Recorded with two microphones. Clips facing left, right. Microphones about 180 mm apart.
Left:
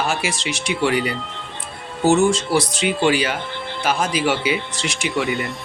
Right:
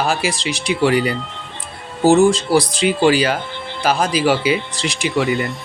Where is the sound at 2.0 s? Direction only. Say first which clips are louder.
Right 4 dB; 35° right (ahead or behind).